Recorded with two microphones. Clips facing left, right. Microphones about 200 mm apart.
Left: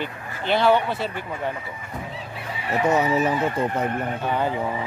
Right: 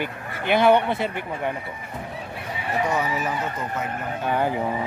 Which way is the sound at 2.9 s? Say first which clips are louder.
Left 5 dB; 25° left (ahead or behind).